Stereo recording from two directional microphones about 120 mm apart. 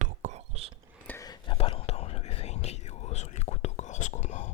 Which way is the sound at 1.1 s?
15° left (ahead or behind).